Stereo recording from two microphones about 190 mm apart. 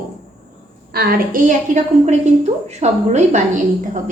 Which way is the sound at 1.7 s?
40° right (ahead or behind).